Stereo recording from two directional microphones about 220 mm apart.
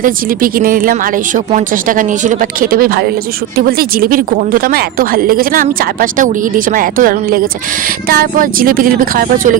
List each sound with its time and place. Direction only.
0.0 s speech: 40° right (ahead or behind)